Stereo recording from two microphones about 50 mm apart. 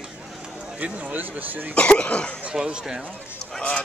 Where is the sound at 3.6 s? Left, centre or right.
Left.